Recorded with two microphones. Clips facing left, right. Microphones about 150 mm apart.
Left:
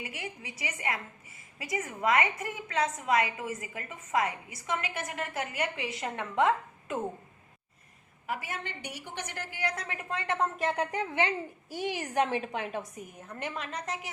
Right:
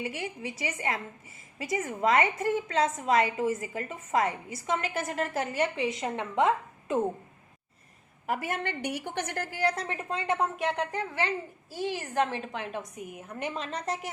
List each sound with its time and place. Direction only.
0.0 s a woman's voice: 30° right (ahead or behind)
8.3 s a woman's voice: 50° right (ahead or behind); by 10.5 s 15° right (ahead or behind)
10.6 s a woman's voice: centre (ahead or behind)
10.9 s a woman's voice: 20° left (ahead or behind)
13.1 s a woman's voice: 10° right (ahead or behind); by 13.9 s 30° right (ahead or behind)